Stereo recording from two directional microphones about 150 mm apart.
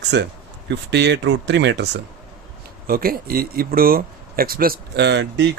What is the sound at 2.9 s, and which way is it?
Speech, 80° right.